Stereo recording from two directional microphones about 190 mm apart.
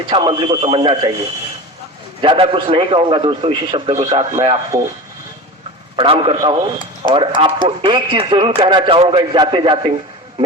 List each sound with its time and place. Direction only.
0.1 s speech: 25° right (ahead or behind)
2.2 s speech: 25° right (ahead or behind)
6.0 s speech: 30° right (ahead or behind)